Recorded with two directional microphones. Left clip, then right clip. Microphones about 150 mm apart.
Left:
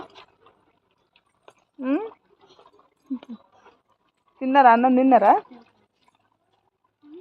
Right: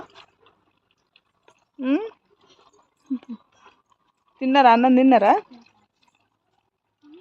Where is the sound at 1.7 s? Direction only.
35° right (ahead or behind).